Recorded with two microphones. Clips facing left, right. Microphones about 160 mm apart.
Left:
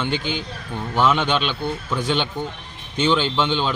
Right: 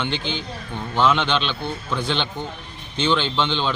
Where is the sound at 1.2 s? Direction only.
10° left (ahead or behind).